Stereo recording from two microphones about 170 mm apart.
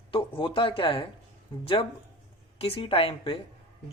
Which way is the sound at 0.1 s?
30° left (ahead or behind).